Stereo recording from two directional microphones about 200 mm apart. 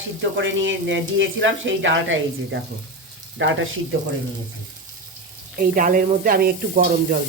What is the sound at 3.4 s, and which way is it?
Speech, 75° right (ahead or behind).